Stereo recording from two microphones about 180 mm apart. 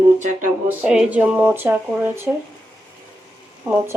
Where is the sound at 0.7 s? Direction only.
5° right (ahead or behind).